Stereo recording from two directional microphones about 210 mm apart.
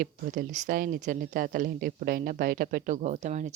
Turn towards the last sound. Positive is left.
turn(degrees=-35)  # may be behind; listen again after turning